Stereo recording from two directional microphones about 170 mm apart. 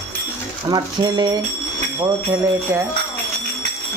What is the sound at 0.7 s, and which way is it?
Speech, 25° right (ahead or behind).